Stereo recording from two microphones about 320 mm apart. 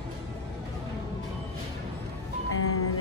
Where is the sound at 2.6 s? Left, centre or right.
Left.